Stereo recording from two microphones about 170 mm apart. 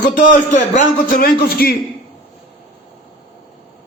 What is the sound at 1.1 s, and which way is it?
Speech, 60° left (ahead or behind).